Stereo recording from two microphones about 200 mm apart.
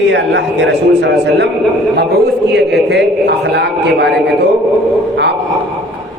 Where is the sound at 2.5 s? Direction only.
55° right (ahead or behind).